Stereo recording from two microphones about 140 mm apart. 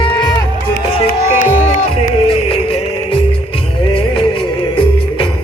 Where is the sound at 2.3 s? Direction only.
40° left (ahead or behind).